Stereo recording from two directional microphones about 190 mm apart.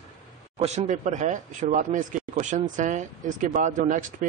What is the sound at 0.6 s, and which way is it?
Speech, 40° right (ahead or behind).